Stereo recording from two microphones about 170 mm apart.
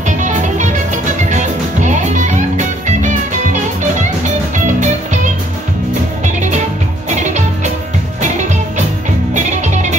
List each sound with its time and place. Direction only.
0.0 s music: 45° right (ahead or behind)
4.7 s music: 45° right (ahead or behind)